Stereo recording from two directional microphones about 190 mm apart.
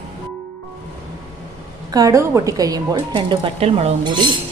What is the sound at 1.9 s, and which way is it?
Speech, 15° right (ahead or behind).